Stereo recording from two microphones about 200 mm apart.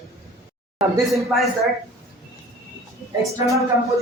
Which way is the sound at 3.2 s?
15° right (ahead or behind).